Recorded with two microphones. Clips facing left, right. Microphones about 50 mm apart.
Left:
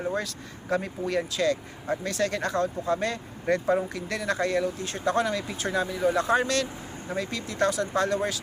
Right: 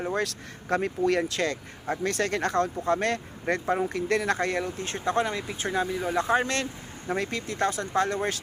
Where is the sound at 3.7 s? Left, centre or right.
Right.